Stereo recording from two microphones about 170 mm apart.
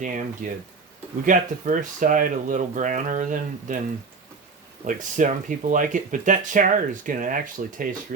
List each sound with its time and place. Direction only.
0.4 s speech: 50° right (ahead or behind)
4.9 s speech: 50° right (ahead or behind)